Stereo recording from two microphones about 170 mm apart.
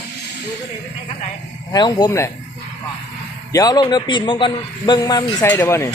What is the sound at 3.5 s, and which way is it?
A man's voice, 20° left (ahead or behind).